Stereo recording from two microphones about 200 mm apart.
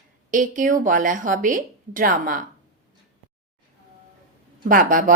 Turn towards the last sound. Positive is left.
turn(degrees=-40)  # may be behind; listen again after turning